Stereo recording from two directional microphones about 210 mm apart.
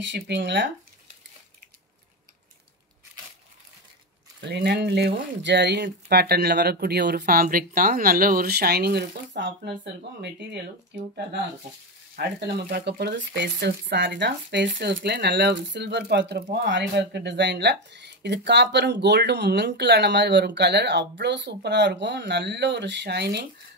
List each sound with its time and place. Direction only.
0.0 s speech: 55° right (ahead or behind)
4.4 s speech: 55° right (ahead or behind)
12.2 s speech: 55° right (ahead or behind)